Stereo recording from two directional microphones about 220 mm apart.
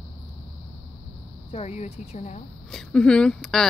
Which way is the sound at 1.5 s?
30° left (ahead or behind).